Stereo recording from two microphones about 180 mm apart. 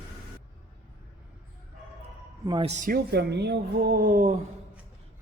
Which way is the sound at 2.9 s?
65° right (ahead or behind).